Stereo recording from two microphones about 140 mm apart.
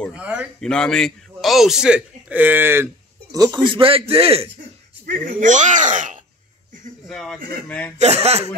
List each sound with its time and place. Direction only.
0.1 s a man's voice: 10° right (ahead or behind)
0.6 s a man's voice: 5° left (ahead or behind); by 4.5 s 45° right (ahead or behind)
5.0 s speech: 75° right (ahead or behind)
7.1 s speech: 5° left (ahead or behind)
8.0 s speech: 50° right (ahead or behind)